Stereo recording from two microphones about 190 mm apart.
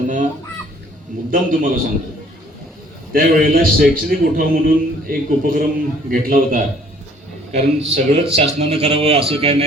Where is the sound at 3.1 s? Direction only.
50° right (ahead or behind).